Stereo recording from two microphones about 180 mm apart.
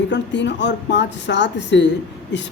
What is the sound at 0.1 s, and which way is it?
A woman's voice, 75° left (ahead or behind).